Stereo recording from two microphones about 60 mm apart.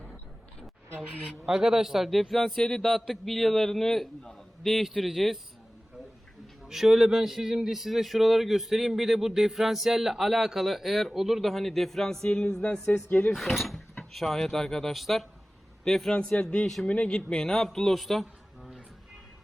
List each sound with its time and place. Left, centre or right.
1.5 s speech: centre
2.8 s speech: centre
6.7 s speech: centre
13.1 s speech: left
13.3 s speech: centre
16.1 s a man's voice: centre